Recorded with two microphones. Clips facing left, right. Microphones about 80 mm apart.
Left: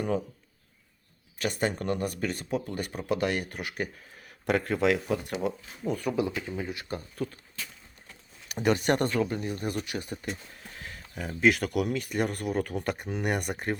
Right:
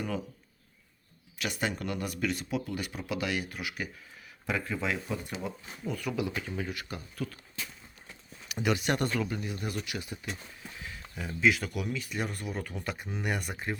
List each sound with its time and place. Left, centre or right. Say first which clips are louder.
1.4 s speech: left 4 dB; left
4.4 s speech: left 7 dB; left
6.5 s speech: left 2 dB; centre
6.8 s speech: left 4 dB; left
8.4 s speech: left 4 dB; left
10.8 s a sound: left 3 dB; left
11.3 s speech: left 4 dB; left